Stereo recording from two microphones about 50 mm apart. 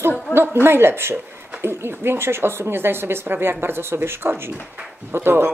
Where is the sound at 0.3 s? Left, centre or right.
Right.